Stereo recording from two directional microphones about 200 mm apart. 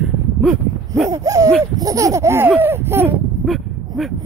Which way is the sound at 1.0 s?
15° right (ahead or behind).